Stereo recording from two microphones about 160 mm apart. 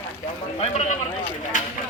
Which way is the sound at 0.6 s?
45° left (ahead or behind).